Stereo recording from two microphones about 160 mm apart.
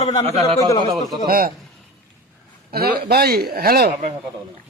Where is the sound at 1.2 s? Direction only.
65° right (ahead or behind).